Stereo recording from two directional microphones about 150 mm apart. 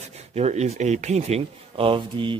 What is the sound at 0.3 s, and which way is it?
Speech, 45° right (ahead or behind).